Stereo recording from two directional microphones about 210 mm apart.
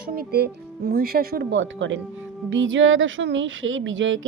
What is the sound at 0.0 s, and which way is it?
A woman's voice, 45° right (ahead or behind).